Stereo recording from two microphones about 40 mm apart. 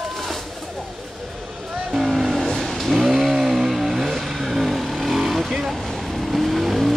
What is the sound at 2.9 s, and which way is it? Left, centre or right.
Vehicle, centre.